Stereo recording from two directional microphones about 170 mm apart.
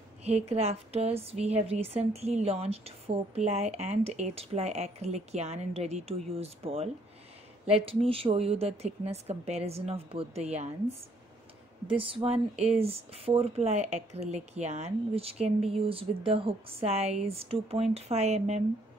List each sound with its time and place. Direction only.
0.2 s a woman's voice: 40° right (ahead or behind)
12.0 s a woman's voice: 35° right (ahead or behind)